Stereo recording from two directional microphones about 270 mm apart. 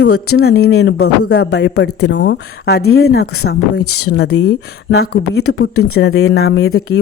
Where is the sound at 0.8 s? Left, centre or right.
Left.